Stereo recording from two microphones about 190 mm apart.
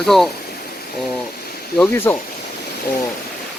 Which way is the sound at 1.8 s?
10° left (ahead or behind).